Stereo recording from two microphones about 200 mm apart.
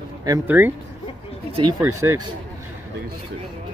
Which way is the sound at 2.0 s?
15° right (ahead or behind).